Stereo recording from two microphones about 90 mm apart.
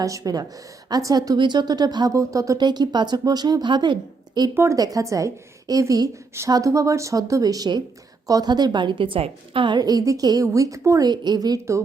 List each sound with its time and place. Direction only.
0.0 s a woman's voice: 40° right (ahead or behind)
1.4 s a woman's voice: 55° right (ahead or behind)
2.1 s a woman's voice: 35° right (ahead or behind)
2.6 s a woman's voice: 50° right (ahead or behind)
4.5 s speech: 30° right (ahead or behind)
4.8 s a woman's voice: 40° right (ahead or behind)
11.1 s a woman's voice: 50° right (ahead or behind)